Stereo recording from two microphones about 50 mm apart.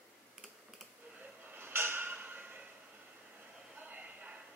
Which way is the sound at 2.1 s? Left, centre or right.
Right.